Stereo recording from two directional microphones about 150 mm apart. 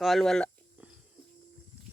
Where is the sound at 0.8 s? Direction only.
10° right (ahead or behind).